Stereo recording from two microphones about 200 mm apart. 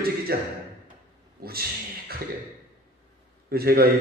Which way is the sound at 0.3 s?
50° right (ahead or behind).